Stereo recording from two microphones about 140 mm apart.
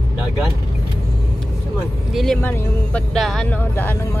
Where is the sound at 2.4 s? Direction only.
10° left (ahead or behind).